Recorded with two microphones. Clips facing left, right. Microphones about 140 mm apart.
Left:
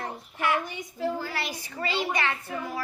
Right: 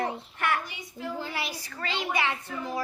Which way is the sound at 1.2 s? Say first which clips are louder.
Left 1 dB; 20° right (ahead or behind).